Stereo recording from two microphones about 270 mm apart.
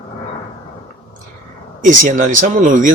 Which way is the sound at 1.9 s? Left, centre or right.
Right.